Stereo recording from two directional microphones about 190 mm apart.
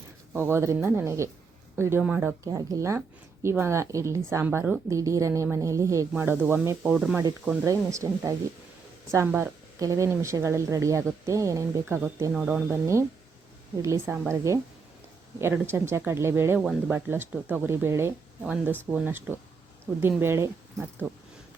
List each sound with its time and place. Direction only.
0.3 s a woman's voice: 15° right (ahead or behind)
2.4 s a woman's voice: 20° right (ahead or behind)
12.3 s speech: 5° right (ahead or behind)
12.6 s a woman's voice: 15° right (ahead or behind)
16.6 s a woman's voice: centre (ahead or behind)